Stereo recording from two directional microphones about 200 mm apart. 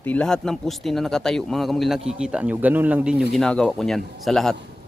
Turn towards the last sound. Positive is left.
turn(degrees=0)  # may be behind; listen again after turning